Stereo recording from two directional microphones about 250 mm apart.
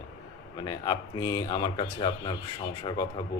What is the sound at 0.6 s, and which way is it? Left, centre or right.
A man's voice, centre.